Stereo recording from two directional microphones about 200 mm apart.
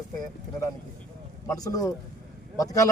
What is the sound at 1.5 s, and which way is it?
Speech, 15° left (ahead or behind).